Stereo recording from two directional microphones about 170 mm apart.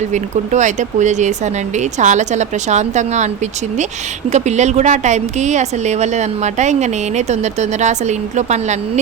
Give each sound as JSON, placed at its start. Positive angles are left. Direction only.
{"t": 0.1, "sound": "a woman's voice", "side_deg": -45}